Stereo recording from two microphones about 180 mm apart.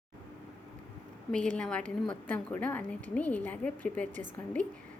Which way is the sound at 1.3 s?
5° left (ahead or behind).